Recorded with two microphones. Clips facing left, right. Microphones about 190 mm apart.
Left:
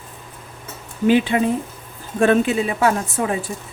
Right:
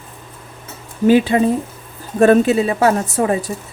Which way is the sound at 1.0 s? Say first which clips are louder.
Right 4 dB; 40° right (ahead or behind).